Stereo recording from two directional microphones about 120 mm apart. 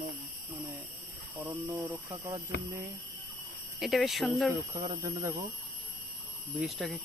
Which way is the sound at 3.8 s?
Centre (ahead or behind).